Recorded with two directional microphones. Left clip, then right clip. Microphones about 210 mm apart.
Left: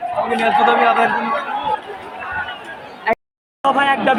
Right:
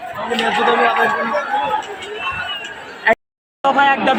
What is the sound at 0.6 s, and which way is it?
Speech, 10° left (ahead or behind).